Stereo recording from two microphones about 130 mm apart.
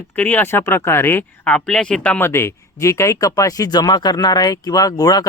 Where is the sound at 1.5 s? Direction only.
5° left (ahead or behind); by 5.2 s 30° left (ahead or behind).